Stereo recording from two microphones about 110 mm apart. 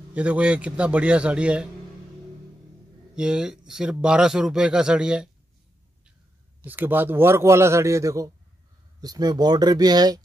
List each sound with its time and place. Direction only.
0.1 s speech: 10° right (ahead or behind)
3.2 s speech: 5° right (ahead or behind)
6.6 s a man's voice: 15° right (ahead or behind); by 10.2 s 40° right (ahead or behind)